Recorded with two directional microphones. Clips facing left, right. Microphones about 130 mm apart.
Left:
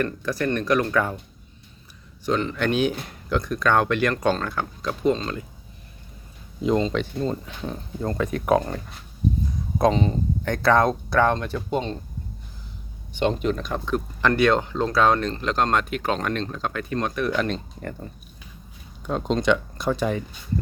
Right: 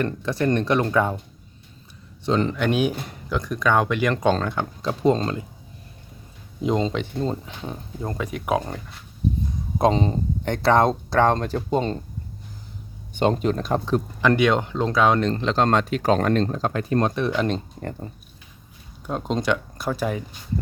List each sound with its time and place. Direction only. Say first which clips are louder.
0.0 s speech: right 2 dB; 25° right (ahead or behind)
2.2 s speech: right 2 dB; 30° right (ahead or behind)
2.6 s speech: right 1 dB; 10° right (ahead or behind)
4.4 s speech: right 2 dB; 25° right (ahead or behind)
6.9 s speech: even; 20° right (ahead or behind)
9.7 s speech: even; 30° right (ahead or behind)
13.1 s speech: right 2 dB; 40° right (ahead or behind)
14.2 s speech: even; 15° right (ahead or behind)
15.3 s speech: right 3 dB; 30° right (ahead or behind)
19.0 s speech: left 2 dB; 10° right (ahead or behind)